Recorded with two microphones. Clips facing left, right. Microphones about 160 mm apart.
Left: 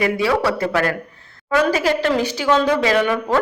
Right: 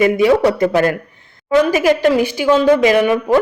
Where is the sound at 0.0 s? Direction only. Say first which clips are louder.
Right 6 dB; 20° right (ahead or behind).